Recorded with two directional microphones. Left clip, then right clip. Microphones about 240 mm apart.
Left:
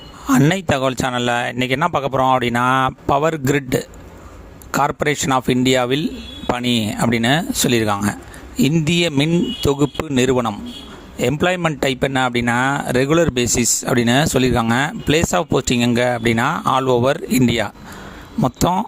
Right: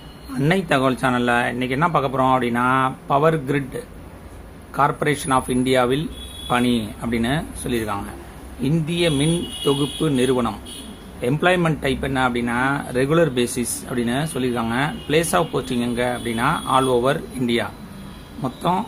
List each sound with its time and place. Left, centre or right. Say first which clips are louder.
0.3 s speech: left 4 dB; left